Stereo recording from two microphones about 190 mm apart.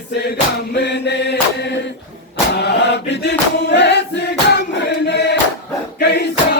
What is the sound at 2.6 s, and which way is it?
Choir, 60° left (ahead or behind).